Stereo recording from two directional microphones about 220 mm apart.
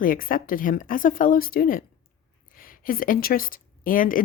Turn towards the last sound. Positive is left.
turn(degrees=40)  # may be behind; listen again after turning